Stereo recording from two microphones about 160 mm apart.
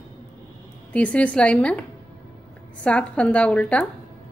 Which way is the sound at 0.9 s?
10° left (ahead or behind).